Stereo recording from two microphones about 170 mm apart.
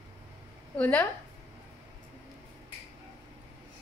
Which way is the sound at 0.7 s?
10° left (ahead or behind).